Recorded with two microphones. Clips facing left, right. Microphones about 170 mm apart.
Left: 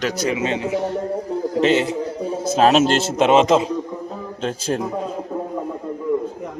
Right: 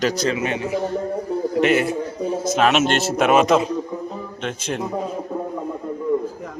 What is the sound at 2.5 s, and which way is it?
A man's voice, 35° left (ahead or behind).